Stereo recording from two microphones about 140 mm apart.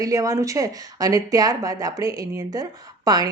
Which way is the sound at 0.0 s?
25° right (ahead or behind).